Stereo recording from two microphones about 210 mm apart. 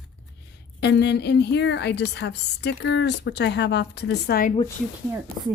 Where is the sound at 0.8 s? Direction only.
55° left (ahead or behind).